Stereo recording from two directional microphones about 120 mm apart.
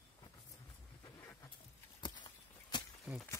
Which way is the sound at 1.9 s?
40° left (ahead or behind).